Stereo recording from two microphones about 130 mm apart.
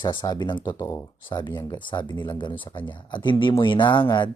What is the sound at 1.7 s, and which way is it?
Speech, 35° left (ahead or behind).